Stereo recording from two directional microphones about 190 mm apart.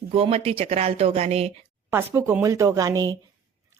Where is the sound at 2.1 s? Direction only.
15° right (ahead or behind).